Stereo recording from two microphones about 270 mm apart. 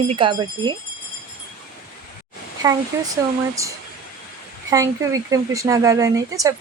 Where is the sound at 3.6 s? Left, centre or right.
Centre.